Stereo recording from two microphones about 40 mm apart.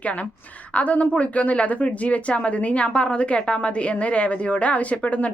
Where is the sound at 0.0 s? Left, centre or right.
Left.